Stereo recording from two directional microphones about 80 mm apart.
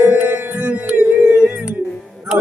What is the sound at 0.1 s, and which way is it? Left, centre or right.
Music, right.